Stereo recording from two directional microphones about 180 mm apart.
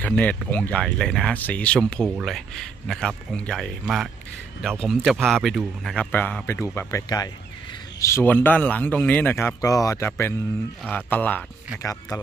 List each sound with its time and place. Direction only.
0.0 s a man's voice: 5° left (ahead or behind)